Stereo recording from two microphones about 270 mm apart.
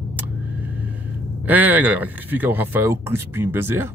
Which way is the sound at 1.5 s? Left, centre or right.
Centre.